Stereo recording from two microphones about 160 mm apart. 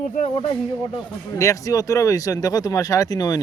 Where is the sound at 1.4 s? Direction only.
20° left (ahead or behind).